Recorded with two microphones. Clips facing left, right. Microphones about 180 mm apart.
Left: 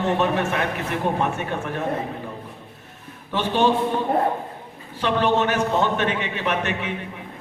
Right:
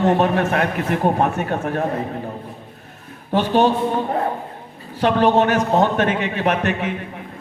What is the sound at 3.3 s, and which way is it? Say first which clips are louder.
Speech: right 4 dB; 40° right (ahead or behind).